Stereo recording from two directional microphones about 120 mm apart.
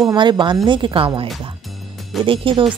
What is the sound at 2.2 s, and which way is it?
Speech, 45° right (ahead or behind).